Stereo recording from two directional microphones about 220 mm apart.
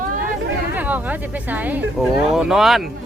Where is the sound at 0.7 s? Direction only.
5° right (ahead or behind).